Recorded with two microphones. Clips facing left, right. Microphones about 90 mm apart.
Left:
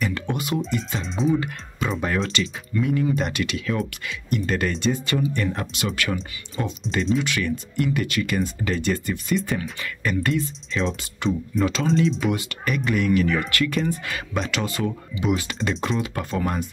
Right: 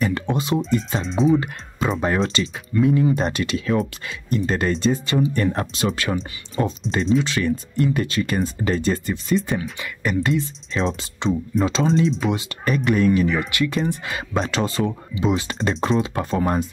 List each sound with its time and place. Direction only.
0.0 s a sound: 30° right (ahead or behind)
0.7 s speech: 35° right (ahead or behind)
1.0 s speech: centre (ahead or behind)
1.3 s speech: 30° right (ahead or behind)
2.7 s speech: 25° right (ahead or behind)
10.7 s speech: 35° right (ahead or behind)